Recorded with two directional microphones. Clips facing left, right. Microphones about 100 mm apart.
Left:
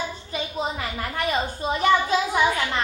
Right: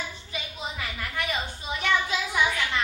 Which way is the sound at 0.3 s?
40° left (ahead or behind).